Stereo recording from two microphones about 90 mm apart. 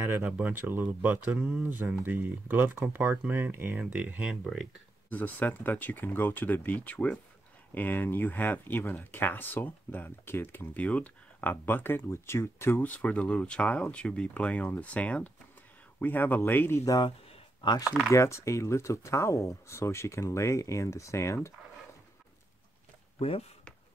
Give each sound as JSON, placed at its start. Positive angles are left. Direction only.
{"t": 0.2, "sound": "speech", "side_deg": -20}
{"t": 5.1, "sound": "speech", "side_deg": 20}
{"t": 16.8, "sound": "speech", "side_deg": 50}
{"t": 18.1, "sound": "speech", "side_deg": 35}
{"t": 23.1, "sound": "speech", "side_deg": 90}